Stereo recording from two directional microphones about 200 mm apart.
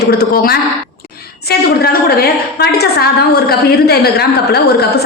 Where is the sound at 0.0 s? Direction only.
50° left (ahead or behind).